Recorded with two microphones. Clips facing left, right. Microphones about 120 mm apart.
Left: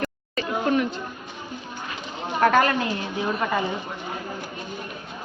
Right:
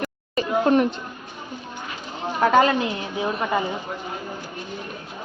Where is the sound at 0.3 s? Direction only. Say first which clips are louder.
Right 4 dB; 35° right (ahead or behind).